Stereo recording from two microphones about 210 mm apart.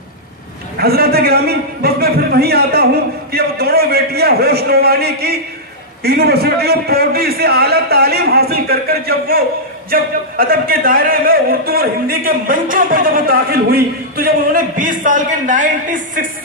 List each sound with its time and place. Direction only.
0.7 s a man's voice: 50° right (ahead or behind)